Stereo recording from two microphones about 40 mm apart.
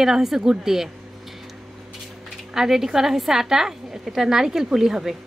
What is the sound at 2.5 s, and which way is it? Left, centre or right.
A woman's voice, centre.